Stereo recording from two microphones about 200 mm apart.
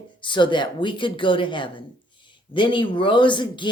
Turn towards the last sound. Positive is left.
turn(degrees=25)  # may be behind; listen again after turning